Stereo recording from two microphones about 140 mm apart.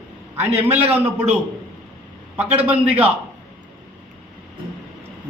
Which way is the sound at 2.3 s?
10° right (ahead or behind).